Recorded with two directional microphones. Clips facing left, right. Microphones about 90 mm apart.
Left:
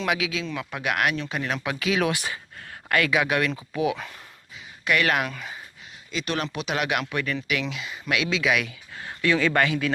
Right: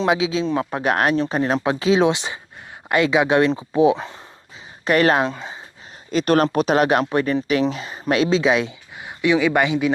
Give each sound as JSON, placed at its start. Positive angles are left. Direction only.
{"t": 0.0, "sound": "speech", "side_deg": -30}
{"t": 6.1, "sound": "speech", "side_deg": -45}
{"t": 9.0, "sound": "speech", "side_deg": -15}